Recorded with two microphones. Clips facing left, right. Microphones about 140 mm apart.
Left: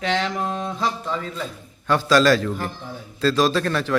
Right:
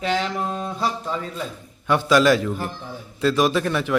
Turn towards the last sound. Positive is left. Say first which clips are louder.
# even
turn(degrees=-15)  # may be behind; listen again after turning